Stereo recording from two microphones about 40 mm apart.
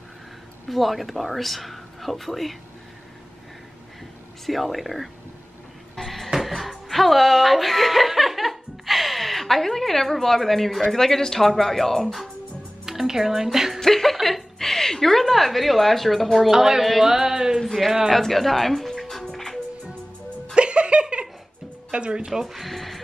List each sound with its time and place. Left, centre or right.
0.7 s a woman's voice: centre
4.5 s a woman's voice: centre
12.8 s speech: centre
13.7 s a woman's voice: centre
16.4 s a sound: centre
17.6 s a woman's voice: centre
19.3 s music: centre
20.5 s music: right
21.9 s speech: right
22.3 s speech: centre